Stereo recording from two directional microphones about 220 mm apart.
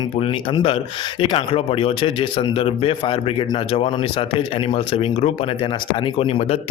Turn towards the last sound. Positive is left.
turn(degrees=25)  # may be behind; listen again after turning